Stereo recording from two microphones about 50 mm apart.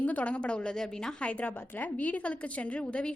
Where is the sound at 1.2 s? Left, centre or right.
Left.